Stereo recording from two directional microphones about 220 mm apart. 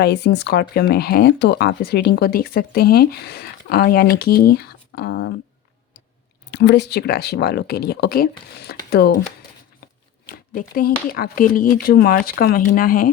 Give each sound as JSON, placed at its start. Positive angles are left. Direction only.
{"t": 0.0, "sound": "speech", "side_deg": 50}
{"t": 6.5, "sound": "speech", "side_deg": 50}
{"t": 10.2, "sound": "speech", "side_deg": 40}